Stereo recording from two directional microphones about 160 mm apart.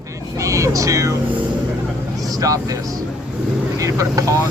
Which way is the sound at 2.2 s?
20° right (ahead or behind).